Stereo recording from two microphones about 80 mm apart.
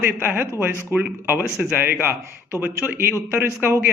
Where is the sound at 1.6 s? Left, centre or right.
Centre.